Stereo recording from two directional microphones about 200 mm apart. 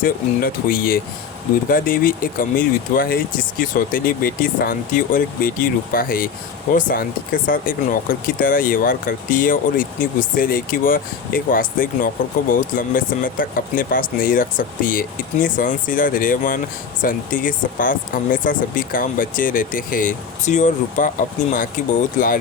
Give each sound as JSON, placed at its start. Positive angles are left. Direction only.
{"t": 0.0, "sound": "speech", "side_deg": 45}